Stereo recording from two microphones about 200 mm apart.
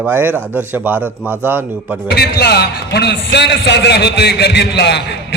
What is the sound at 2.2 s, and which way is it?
A man's voice, 55° left (ahead or behind).